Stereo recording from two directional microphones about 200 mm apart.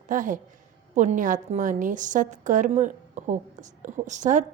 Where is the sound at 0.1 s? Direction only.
40° right (ahead or behind).